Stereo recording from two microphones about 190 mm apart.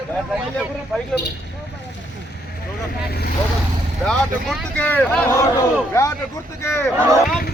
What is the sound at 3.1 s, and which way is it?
Speech, 55° left (ahead or behind).